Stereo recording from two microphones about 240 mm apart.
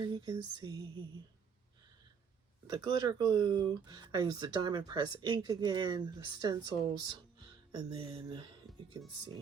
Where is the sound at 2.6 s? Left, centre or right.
Centre.